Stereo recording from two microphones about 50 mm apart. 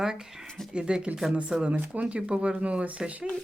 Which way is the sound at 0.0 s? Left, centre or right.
Centre.